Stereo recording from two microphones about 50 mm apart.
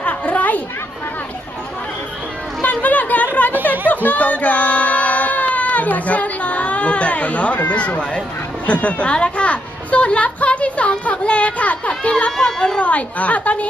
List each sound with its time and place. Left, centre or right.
0.0 s chatter: left
2.6 s chatter: left
3.6 s a sound: left
7.7 s speech: left
8.6 s a sound: left
12.4 s speech: centre